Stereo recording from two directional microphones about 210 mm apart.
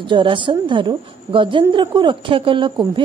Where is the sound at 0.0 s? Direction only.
25° right (ahead or behind).